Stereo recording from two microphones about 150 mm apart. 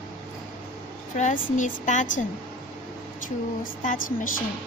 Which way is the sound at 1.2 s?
55° left (ahead or behind).